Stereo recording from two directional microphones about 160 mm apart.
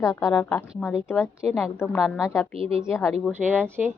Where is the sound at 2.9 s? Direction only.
15° left (ahead or behind).